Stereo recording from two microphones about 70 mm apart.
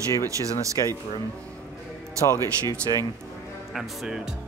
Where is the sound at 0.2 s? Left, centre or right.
Right.